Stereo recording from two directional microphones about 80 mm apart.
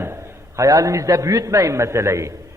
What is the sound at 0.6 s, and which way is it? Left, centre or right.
A man's voice, right.